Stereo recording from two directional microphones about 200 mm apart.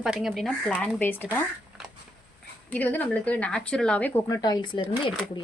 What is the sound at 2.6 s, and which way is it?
Speech, 10° left (ahead or behind).